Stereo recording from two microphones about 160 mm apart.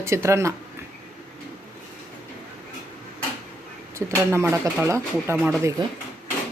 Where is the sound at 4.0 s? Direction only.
15° right (ahead or behind).